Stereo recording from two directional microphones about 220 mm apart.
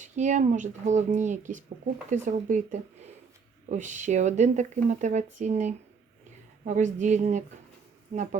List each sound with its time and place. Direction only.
0.0 s speech: 35° right (ahead or behind)